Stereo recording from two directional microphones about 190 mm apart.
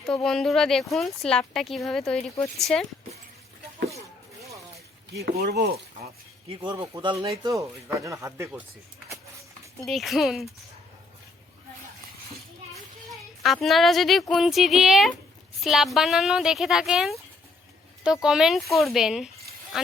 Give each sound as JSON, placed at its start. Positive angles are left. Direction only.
{"t": 0.1, "sound": "a woman's voice", "side_deg": 5}
{"t": 5.1, "sound": "speech", "side_deg": -55}
{"t": 6.5, "sound": "a man's voice", "side_deg": -25}
{"t": 9.8, "sound": "a woman's voice", "side_deg": 0}
{"t": 13.1, "sound": "a woman's voice", "side_deg": 0}